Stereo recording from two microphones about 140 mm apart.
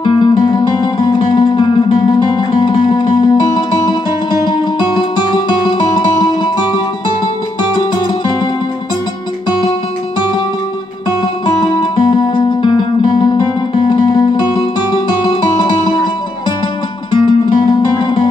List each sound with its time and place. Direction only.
0.0 s music: 35° left (ahead or behind)
11.1 s music: 35° left (ahead or behind)
17.1 s music: 35° left (ahead or behind)